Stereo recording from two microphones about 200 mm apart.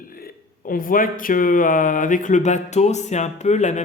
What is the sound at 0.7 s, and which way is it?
Speech, 45° left (ahead or behind).